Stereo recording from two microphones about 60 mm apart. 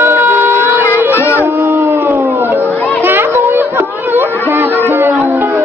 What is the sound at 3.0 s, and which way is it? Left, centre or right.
Children playing, right.